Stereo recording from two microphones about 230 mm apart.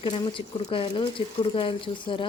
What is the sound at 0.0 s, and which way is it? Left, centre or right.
Speech, left.